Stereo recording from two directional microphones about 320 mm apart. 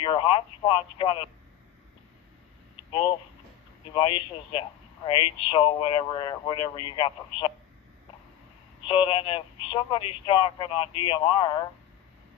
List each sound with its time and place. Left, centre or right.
0.0 s speech: centre
3.9 s speech: centre
8.8 s speech: centre